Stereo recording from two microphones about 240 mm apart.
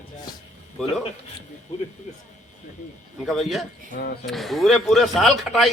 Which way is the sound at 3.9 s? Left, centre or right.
Left.